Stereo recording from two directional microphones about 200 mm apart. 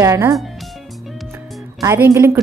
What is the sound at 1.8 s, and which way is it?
Speech, 15° right (ahead or behind).